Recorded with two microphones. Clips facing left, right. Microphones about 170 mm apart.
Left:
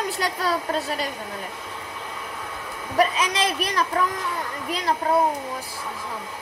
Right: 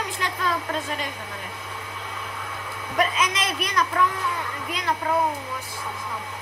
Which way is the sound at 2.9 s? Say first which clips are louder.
Left 3 dB; 35° left (ahead or behind).